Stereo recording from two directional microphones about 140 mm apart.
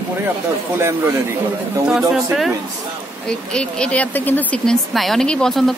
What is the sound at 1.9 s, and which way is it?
Speech, 5° right (ahead or behind).